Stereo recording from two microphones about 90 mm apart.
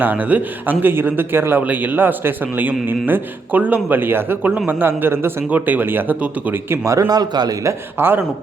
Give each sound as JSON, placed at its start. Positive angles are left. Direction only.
{"t": 0.0, "sound": "a man's voice", "side_deg": -20}
{"t": 6.8, "sound": "a man's voice", "side_deg": -35}
{"t": 7.6, "sound": "a man's voice", "side_deg": -30}